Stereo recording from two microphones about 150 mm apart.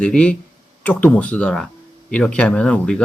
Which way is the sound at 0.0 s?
5° left (ahead or behind).